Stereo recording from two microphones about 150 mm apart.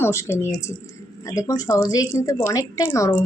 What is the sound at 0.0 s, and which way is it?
A woman's voice, 15° left (ahead or behind).